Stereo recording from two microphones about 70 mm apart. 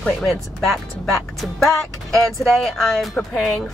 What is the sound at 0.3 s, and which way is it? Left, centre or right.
A woman's voice, centre.